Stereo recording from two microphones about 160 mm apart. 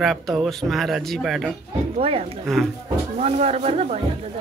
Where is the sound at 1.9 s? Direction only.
40° right (ahead or behind).